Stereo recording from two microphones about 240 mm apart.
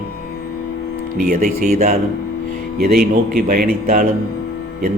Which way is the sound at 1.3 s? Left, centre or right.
Right.